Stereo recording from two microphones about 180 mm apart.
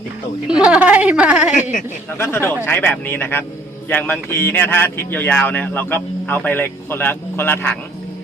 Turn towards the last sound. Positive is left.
turn(degrees=10)  # may be behind; listen again after turning